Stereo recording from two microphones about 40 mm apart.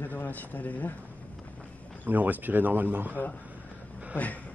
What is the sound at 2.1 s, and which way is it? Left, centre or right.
Speech, right.